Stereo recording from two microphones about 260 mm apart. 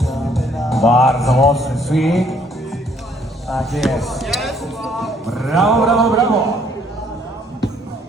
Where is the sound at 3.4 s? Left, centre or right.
Centre.